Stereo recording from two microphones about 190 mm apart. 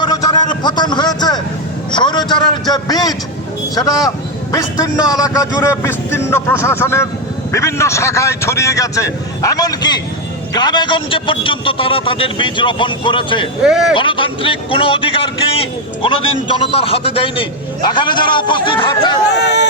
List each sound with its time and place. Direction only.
0.0 s a sound: 20° left (ahead or behind)
1.9 s speech: 25° left (ahead or behind)
4.5 s a man's voice: 20° left (ahead or behind)
13.6 s speech: 5° right (ahead or behind)
13.9 s speech: 25° left (ahead or behind)
19.3 s speech: 65° left (ahead or behind)